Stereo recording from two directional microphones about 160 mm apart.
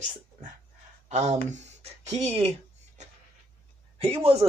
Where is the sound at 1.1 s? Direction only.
45° right (ahead or behind).